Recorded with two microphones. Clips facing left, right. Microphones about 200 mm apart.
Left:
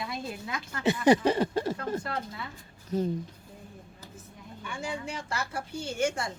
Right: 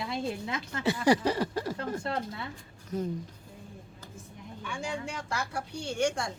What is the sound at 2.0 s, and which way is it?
Speech, 25° right (ahead or behind).